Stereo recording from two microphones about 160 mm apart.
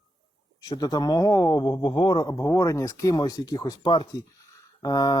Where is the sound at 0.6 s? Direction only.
25° left (ahead or behind).